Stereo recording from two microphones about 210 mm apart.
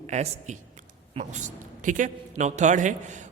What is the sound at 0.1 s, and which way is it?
A man's voice, 35° right (ahead or behind).